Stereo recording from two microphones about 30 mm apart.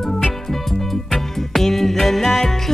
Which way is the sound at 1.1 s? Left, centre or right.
Centre.